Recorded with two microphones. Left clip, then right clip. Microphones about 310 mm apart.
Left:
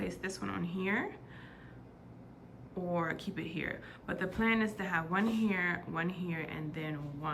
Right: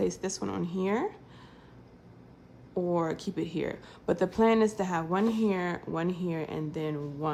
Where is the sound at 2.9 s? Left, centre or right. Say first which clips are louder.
Right 1 dB; centre.